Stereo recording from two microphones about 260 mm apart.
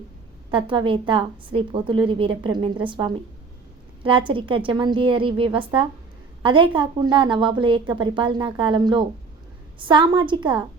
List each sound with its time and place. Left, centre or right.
0.5 s a woman's voice: centre